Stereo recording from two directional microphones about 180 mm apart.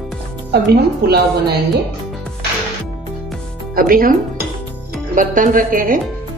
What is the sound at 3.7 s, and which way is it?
Speech, 55° right (ahead or behind).